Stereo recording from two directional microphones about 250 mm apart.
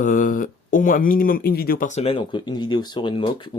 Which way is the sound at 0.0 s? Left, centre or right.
Left.